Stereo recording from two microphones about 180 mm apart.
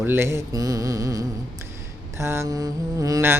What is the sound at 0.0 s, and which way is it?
Mantra, 15° right (ahead or behind).